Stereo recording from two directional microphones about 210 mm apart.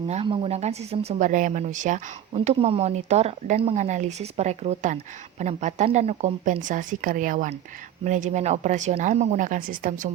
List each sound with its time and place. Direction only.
0.1 s speech: 30° right (ahead or behind)